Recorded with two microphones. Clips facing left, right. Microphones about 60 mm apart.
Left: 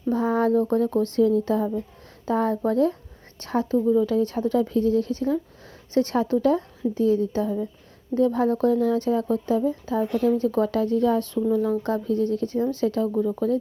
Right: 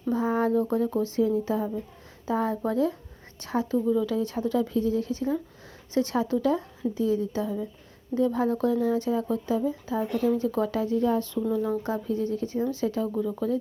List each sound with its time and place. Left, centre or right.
0.1 s speech: left
11.8 s speech: left